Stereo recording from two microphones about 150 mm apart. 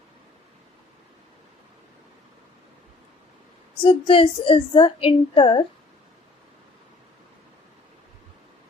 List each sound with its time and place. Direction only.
3.8 s a woman's voice: 35° left (ahead or behind)